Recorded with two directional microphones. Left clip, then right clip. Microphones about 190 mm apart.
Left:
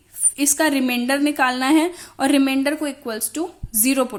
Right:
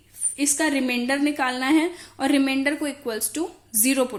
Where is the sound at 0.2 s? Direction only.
35° left (ahead or behind).